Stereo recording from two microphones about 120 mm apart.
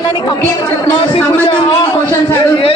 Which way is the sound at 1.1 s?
40° left (ahead or behind).